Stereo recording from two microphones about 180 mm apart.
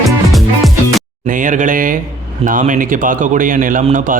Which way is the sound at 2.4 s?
45° right (ahead or behind).